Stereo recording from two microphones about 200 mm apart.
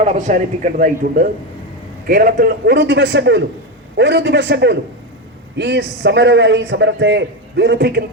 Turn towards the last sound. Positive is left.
turn(degrees=-55)  # may be behind; listen again after turning